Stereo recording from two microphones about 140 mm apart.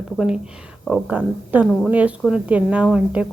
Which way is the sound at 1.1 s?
10° right (ahead or behind).